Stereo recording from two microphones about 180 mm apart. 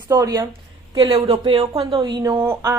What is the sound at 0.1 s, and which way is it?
A woman's voice, 20° right (ahead or behind).